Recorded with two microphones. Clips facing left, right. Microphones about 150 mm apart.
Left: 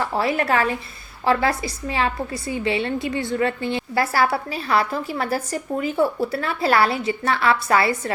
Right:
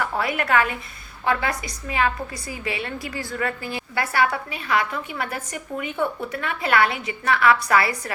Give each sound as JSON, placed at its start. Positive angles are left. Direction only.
{"t": 0.0, "sound": "a woman's voice", "side_deg": 30}